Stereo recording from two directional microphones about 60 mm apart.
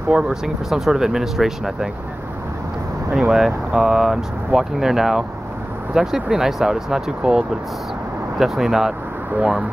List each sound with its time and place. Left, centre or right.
0.1 s speech: centre
3.2 s speech: centre
9.4 s speech: centre